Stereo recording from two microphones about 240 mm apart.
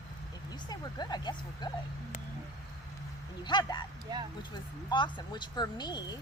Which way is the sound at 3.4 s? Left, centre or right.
Centre.